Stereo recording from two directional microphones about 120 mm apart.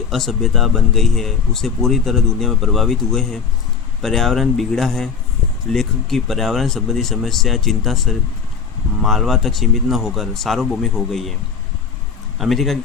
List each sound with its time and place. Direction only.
0.1 s speech: centre (ahead or behind)
12.4 s speech: centre (ahead or behind)